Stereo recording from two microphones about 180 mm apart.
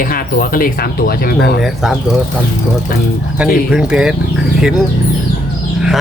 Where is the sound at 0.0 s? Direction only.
55° left (ahead or behind).